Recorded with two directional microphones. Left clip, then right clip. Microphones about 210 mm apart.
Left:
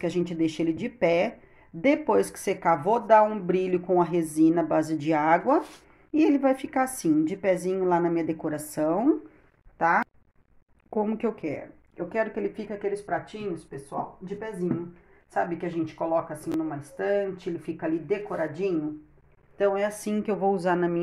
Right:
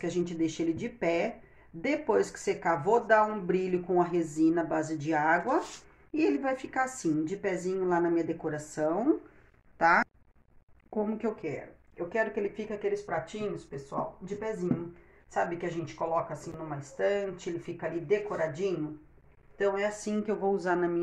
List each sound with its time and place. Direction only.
0.0 s a woman's voice: 35° left (ahead or behind)
9.8 s speech: 15° left (ahead or behind)
10.9 s speech: 30° left (ahead or behind)
11.1 s a woman's voice: 45° left (ahead or behind)